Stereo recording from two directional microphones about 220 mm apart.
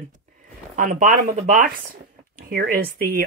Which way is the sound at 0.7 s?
35° right (ahead or behind).